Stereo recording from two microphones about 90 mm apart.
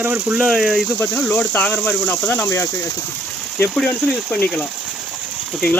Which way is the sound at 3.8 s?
10° left (ahead or behind).